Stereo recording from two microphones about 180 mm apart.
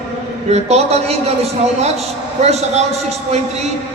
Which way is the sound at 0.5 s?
35° right (ahead or behind).